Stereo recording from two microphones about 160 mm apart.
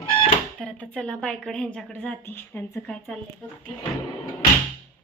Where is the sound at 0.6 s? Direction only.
5° left (ahead or behind).